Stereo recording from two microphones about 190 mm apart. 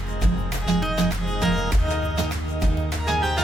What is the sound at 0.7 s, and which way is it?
Music, centre (ahead or behind).